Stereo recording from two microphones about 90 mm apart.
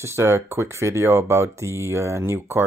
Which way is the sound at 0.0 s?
30° right (ahead or behind).